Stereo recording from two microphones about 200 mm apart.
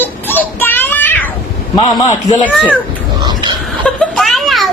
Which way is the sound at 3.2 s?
20° right (ahead or behind).